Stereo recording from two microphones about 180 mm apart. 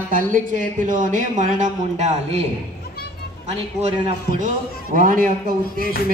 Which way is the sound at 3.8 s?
40° right (ahead or behind).